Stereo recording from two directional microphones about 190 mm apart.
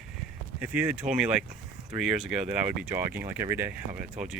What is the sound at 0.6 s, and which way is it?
Speech, 10° right (ahead or behind).